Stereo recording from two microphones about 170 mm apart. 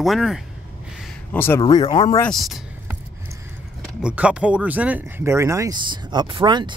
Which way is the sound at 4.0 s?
5° right (ahead or behind).